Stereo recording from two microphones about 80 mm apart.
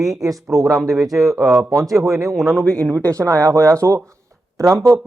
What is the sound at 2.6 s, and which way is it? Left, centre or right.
Speech, centre.